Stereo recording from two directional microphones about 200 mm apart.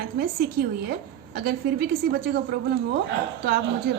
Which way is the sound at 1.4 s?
50° right (ahead or behind).